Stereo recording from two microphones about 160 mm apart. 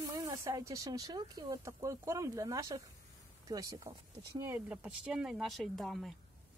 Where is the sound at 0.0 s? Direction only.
20° right (ahead or behind); by 6.1 s centre (ahead or behind).